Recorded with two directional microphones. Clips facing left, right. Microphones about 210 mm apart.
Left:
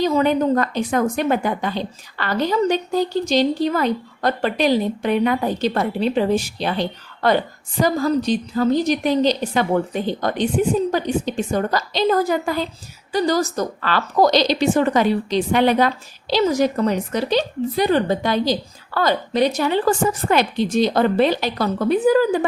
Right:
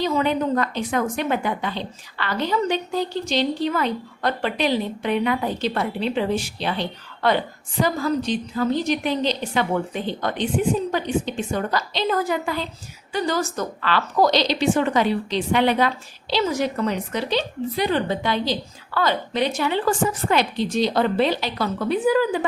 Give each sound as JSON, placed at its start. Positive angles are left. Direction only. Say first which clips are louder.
{"t": 0.0, "sound": "a woman's voice", "louder": "left 4 dB", "side_deg": 45}